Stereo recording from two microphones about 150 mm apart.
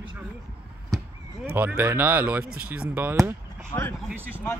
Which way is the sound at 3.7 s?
15° left (ahead or behind).